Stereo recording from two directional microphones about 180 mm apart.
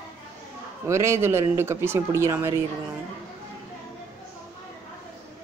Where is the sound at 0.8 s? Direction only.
15° right (ahead or behind).